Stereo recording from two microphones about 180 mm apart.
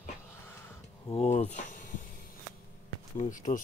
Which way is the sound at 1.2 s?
35° left (ahead or behind).